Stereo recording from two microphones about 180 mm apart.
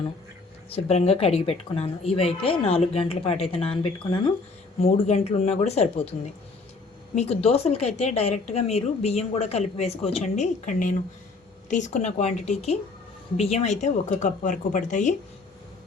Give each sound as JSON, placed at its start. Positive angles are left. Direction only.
{"t": 0.7, "sound": "a woman's voice", "side_deg": 35}
{"t": 7.2, "sound": "a woman's voice", "side_deg": 35}